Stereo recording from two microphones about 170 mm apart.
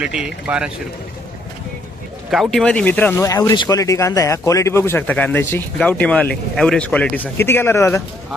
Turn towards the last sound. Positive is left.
turn(degrees=15)  # may be behind; listen again after turning